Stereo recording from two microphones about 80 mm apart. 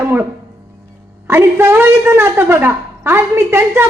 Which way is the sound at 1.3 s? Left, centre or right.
Right.